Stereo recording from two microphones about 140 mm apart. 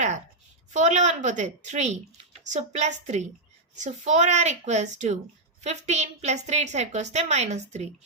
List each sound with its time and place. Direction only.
0.7 s a woman's voice: 55° right (ahead or behind)